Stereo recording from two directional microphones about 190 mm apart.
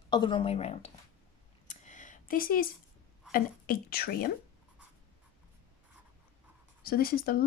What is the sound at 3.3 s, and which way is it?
A woman's voice, 50° left (ahead or behind).